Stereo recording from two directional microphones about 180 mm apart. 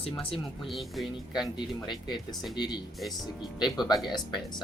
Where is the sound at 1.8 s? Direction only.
25° left (ahead or behind).